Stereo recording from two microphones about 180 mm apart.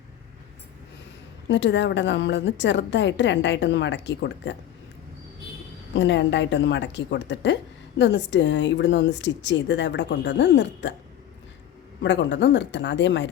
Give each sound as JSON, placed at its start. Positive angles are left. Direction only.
{"t": 1.5, "sound": "a woman's voice", "side_deg": 85}
{"t": 5.9, "sound": "a woman's voice", "side_deg": 80}
{"t": 12.0, "sound": "a woman's voice", "side_deg": 80}